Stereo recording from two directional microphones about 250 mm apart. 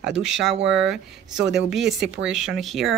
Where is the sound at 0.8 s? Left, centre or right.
Centre.